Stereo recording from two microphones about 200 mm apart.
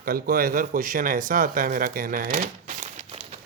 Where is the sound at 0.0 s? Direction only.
45° right (ahead or behind).